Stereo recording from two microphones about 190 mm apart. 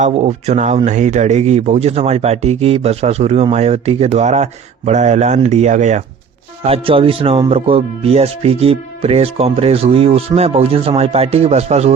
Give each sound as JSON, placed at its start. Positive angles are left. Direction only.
{"t": 0.0, "sound": "speech", "side_deg": -40}